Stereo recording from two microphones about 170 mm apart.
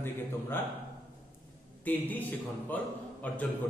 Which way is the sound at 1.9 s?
10° left (ahead or behind).